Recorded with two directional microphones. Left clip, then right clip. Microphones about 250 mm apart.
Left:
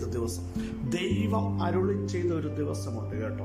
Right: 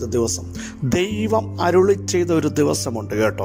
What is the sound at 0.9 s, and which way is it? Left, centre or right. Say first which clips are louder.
Music: right 11 dB; right.